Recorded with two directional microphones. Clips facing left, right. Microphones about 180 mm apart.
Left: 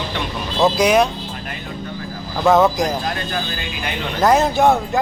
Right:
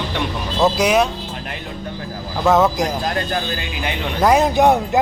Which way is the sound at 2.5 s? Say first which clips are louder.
Left 1 dB; 5° right (ahead or behind).